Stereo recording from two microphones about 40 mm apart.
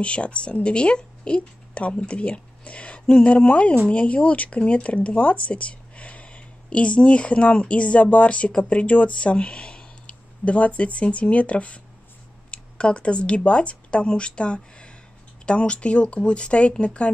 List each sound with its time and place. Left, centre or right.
0.0 s speech: left